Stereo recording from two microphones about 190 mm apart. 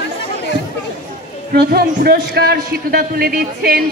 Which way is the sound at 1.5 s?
55° right (ahead or behind).